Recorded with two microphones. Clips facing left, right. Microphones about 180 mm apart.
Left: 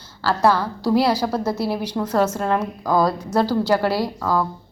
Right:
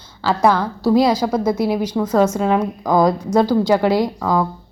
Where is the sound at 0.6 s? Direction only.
10° left (ahead or behind).